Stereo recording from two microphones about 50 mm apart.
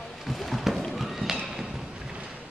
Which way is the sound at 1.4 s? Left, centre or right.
Centre.